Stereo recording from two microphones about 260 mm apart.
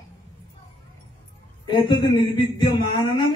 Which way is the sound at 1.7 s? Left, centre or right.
Centre.